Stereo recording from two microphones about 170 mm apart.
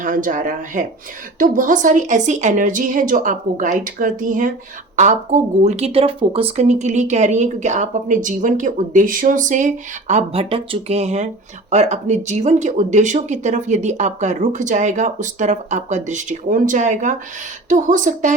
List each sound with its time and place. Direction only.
0.0 s speech: 50° right (ahead or behind)